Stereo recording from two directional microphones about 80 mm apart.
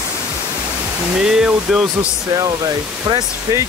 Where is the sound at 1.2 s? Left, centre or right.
Centre.